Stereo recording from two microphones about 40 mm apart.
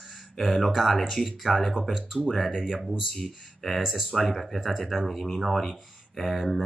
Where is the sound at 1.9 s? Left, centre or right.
Centre.